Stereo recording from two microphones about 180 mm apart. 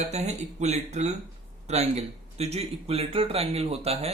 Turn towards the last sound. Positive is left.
turn(degrees=-35)  # may be behind; listen again after turning